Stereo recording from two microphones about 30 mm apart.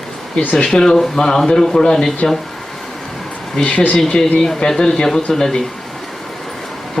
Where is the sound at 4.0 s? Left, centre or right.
Centre.